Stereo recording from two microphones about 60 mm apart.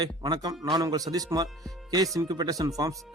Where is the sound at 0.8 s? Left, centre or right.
Right.